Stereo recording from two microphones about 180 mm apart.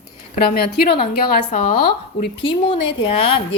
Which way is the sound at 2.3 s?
30° left (ahead or behind).